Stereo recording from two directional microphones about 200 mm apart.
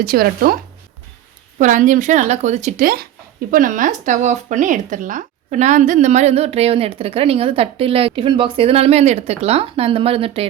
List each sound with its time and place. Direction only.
0.0 s speech: 50° right (ahead or behind); by 10.4 s 30° right (ahead or behind)